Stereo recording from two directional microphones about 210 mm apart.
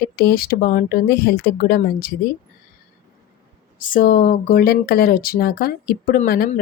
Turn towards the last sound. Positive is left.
turn(degrees=45)  # may be behind; listen again after turning